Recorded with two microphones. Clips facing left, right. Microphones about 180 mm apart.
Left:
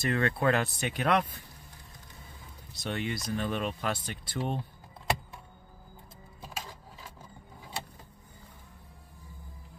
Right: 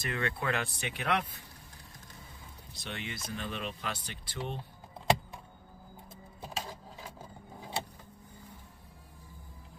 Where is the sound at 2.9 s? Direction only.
45° left (ahead or behind).